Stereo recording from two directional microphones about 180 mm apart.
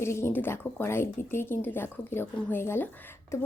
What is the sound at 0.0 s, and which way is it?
A woman's voice, 15° left (ahead or behind).